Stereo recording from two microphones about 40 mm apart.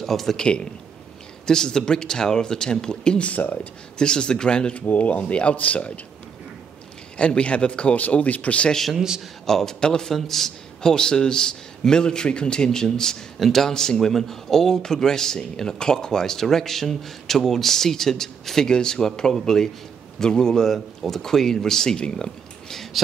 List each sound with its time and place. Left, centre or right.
0.0 s speech: centre
0.4 s speech: left
3.3 s speech: left
4.0 s speech: left
4.7 s speech: left
7.2 s speech: left
7.9 s speech: left
8.9 s a man's voice: centre
9.5 s speech: centre